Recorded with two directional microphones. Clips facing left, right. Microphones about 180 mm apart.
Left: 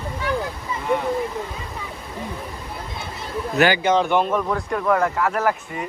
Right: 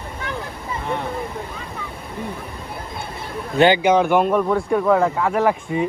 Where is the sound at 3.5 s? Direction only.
25° right (ahead or behind).